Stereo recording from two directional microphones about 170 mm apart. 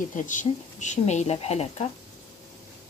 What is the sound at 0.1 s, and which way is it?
Speech, 50° left (ahead or behind).